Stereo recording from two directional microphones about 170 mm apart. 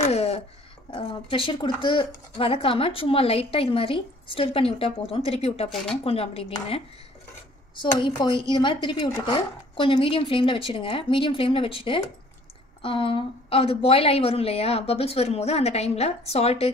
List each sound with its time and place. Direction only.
0.0 s a sound: 40° left (ahead or behind)
0.8 s a woman's voice: 30° left (ahead or behind)
8.0 s a woman's voice: 25° left (ahead or behind)